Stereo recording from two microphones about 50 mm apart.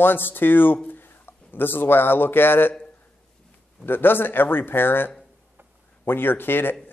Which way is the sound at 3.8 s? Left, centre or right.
Left.